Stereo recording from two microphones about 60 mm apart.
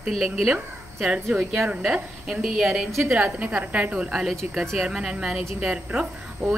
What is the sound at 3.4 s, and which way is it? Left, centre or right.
Speech, right.